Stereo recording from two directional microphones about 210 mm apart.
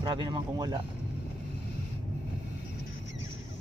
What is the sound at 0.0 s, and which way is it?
Speech, 20° right (ahead or behind).